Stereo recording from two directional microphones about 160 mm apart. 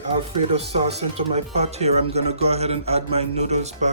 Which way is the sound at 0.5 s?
40° right (ahead or behind).